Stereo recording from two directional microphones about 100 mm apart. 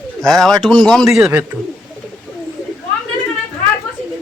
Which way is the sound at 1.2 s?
20° right (ahead or behind).